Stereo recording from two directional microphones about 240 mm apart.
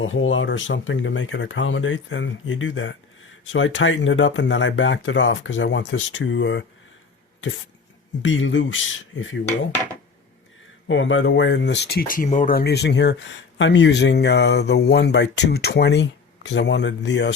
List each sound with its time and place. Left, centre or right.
0.0 s speech: left
8.2 s speech: left
10.8 s speech: left